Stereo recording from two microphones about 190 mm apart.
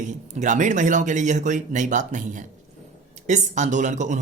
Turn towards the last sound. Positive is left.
turn(degrees=-40)  # may be behind; listen again after turning